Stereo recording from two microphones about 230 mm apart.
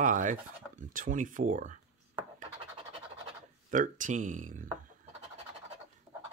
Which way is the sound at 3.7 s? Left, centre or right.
Right.